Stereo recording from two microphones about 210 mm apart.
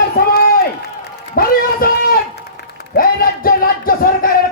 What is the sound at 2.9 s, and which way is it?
Speech, 45° left (ahead or behind).